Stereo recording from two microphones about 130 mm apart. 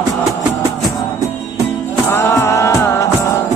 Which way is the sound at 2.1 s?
20° left (ahead or behind).